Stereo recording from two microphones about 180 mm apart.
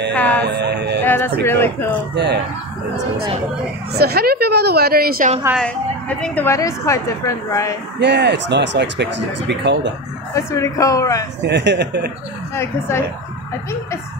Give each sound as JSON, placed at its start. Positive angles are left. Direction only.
{"t": 0.1, "sound": "music", "side_deg": 10}
{"t": 0.4, "sound": "music", "side_deg": -65}
{"t": 1.0, "sound": "a woman's voice", "side_deg": 10}
{"t": 2.1, "sound": "speech", "side_deg": -70}
{"t": 3.9, "sound": "a woman's voice", "side_deg": -60}
{"t": 5.6, "sound": "a woman's voice", "side_deg": 5}
{"t": 8.0, "sound": "speech", "side_deg": -75}
{"t": 10.3, "sound": "a woman's voice", "side_deg": 15}
{"t": 11.4, "sound": "speech", "side_deg": -75}
{"t": 12.5, "sound": "a woman's voice", "side_deg": 15}